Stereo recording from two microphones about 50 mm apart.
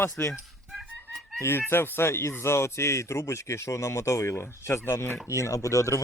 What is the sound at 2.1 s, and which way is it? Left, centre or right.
Speech, left.